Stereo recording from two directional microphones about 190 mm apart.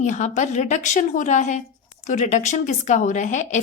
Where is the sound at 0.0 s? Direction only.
40° left (ahead or behind).